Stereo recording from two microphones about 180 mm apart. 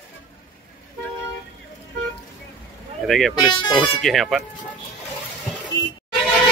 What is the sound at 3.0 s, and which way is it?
Speech, centre (ahead or behind).